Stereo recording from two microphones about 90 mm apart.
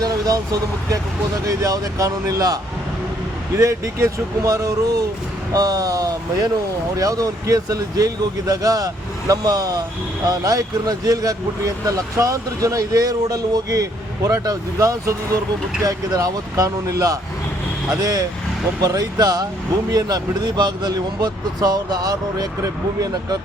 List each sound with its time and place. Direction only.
0.0 s speech: 40° right (ahead or behind)
3.6 s speech: 35° right (ahead or behind)